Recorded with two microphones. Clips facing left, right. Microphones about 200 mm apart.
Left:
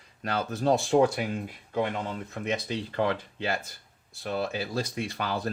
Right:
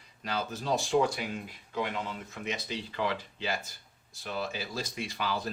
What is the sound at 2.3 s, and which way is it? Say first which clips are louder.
Speech: left 6 dB; 55° left (ahead or behind).